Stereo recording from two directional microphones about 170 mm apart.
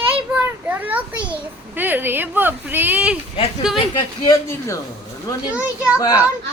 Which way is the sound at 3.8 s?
25° left (ahead or behind).